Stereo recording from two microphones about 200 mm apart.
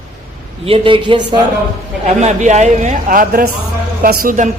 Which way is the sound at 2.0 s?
35° right (ahead or behind).